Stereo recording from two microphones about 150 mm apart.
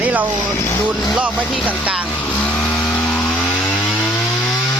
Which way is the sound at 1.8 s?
10° right (ahead or behind).